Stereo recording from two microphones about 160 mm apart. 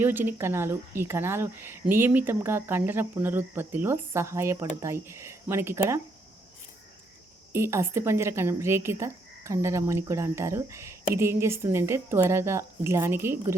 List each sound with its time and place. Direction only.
0.0 s speech: 15° right (ahead or behind)
7.5 s speech: 15° right (ahead or behind)